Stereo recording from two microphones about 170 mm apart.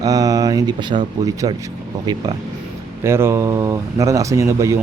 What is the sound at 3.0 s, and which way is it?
Speech, 15° right (ahead or behind).